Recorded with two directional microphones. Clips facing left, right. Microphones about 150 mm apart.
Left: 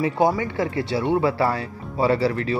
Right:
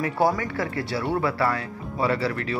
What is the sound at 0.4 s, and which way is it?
A man's voice, 20° left (ahead or behind).